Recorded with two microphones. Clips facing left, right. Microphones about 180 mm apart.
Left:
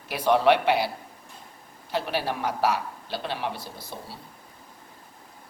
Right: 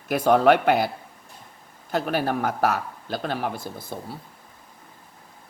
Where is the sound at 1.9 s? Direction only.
45° right (ahead or behind).